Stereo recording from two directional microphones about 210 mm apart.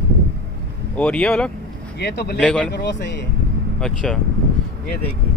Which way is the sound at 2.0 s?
50° left (ahead or behind).